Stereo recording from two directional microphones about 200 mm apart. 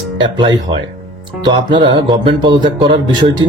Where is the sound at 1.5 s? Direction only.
25° right (ahead or behind).